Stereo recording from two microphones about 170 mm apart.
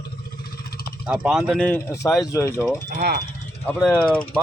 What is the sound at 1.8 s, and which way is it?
Speech, 15° left (ahead or behind).